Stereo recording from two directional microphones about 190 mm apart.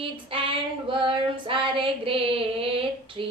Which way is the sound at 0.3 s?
30° right (ahead or behind).